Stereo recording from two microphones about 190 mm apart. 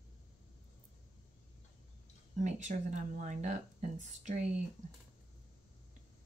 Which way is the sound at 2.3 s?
40° right (ahead or behind).